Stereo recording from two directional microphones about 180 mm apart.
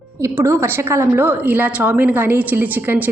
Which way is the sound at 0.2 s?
15° right (ahead or behind).